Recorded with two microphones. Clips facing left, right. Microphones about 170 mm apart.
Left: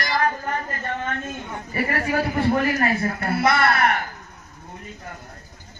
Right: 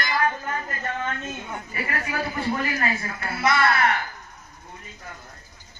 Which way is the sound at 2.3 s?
55° left (ahead or behind).